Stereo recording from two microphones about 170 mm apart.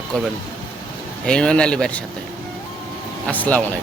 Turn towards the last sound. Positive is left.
turn(degrees=10)  # may be behind; listen again after turning